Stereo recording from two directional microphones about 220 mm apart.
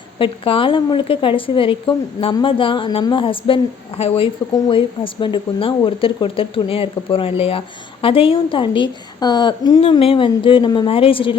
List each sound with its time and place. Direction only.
0.2 s a woman's voice: 25° left (ahead or behind)